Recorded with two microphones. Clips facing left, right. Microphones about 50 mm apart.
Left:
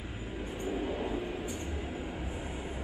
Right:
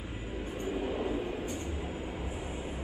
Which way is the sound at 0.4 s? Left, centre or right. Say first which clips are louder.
Even; centre.